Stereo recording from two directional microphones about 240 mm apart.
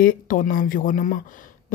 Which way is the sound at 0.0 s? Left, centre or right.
Left.